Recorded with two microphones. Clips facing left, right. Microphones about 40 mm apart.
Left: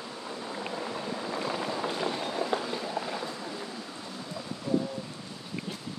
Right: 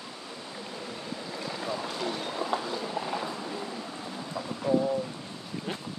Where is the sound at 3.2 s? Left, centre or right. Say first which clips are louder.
Right 2 dB; centre.